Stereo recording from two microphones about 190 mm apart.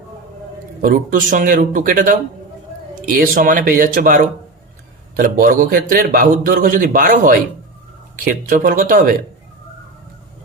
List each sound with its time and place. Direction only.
0.8 s a man's voice: 45° right (ahead or behind)